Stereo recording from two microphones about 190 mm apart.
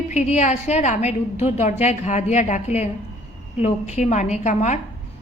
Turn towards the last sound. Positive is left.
turn(degrees=40)  # may be behind; listen again after turning